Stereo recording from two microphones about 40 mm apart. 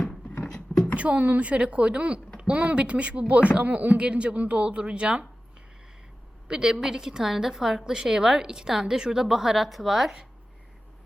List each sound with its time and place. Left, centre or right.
0.5 s a sound: centre
0.9 s speech: right
4.0 s a woman's voice: right
6.5 s a woman's voice: right